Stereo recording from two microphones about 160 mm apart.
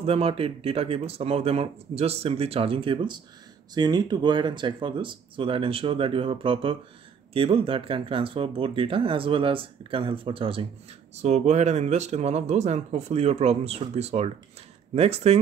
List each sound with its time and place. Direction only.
0.0 s speech: 40° right (ahead or behind)
11.1 s speech: 45° right (ahead or behind)